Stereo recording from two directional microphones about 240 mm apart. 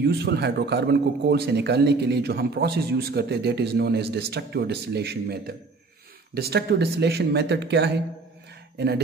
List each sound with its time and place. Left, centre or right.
0.0 s a man's voice: right